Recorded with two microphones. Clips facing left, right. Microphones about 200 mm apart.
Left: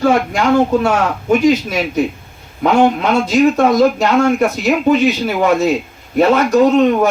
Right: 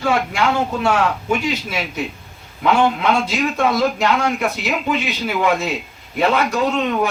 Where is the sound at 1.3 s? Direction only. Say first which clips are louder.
Left 9 dB; 40° left (ahead or behind).